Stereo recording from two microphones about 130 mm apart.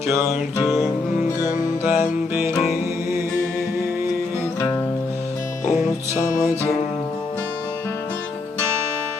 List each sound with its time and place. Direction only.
0.6 s music: centre (ahead or behind)
1.8 s music: 15° right (ahead or behind)
5.6 s music: 75° left (ahead or behind)